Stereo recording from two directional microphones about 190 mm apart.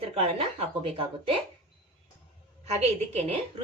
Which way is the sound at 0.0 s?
30° right (ahead or behind).